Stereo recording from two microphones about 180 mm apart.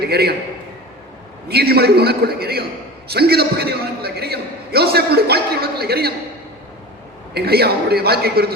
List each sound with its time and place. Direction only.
0.0 s a man's voice: 60° right (ahead or behind)
1.5 s a man's voice: 60° right (ahead or behind)
7.3 s a man's voice: 60° right (ahead or behind)